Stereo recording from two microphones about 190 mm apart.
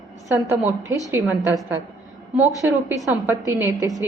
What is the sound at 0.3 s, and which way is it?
Speech, 15° right (ahead or behind).